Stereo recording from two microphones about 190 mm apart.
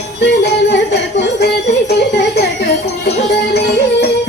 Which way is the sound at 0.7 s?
60° left (ahead or behind).